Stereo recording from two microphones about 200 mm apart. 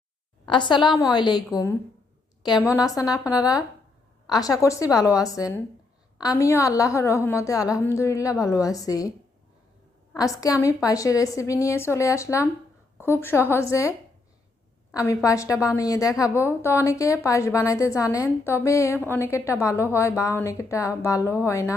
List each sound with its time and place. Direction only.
0.4 s a woman's voice: 25° left (ahead or behind)
2.6 s a woman's voice: 15° left (ahead or behind)
10.2 s a woman's voice: 15° left (ahead or behind)
14.9 s a woman's voice: 15° left (ahead or behind)